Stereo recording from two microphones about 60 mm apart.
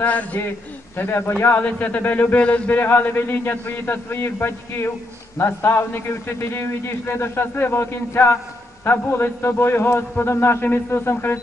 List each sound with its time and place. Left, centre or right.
0.0 s speech: left
0.9 s a man's voice: left
1.4 s a man's voice: left
2.8 s a man's voice: left
8.8 s a man's voice: left